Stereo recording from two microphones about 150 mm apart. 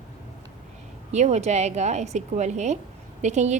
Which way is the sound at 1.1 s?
50° right (ahead or behind).